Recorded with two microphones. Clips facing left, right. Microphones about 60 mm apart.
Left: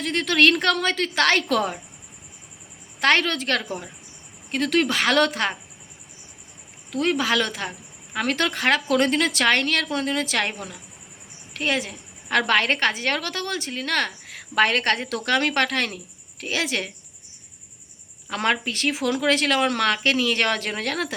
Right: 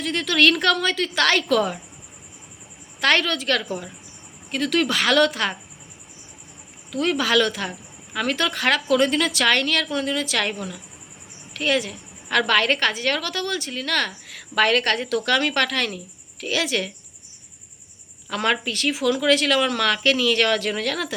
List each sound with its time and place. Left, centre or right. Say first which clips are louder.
0.0 s a woman's voice: even; left
3.0 s a woman's voice: even; left
6.9 s a woman's voice: right 2 dB; left
18.3 s a woman's voice: right 1 dB; left